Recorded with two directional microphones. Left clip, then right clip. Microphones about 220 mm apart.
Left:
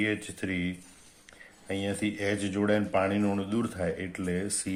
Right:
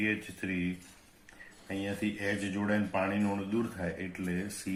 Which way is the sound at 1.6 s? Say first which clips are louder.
Left 4 dB; 50° left (ahead or behind).